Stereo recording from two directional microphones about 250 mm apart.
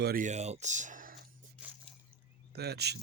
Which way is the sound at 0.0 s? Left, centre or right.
Right.